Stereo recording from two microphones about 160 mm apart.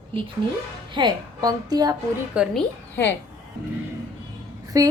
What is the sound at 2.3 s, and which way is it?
Speech, centre (ahead or behind).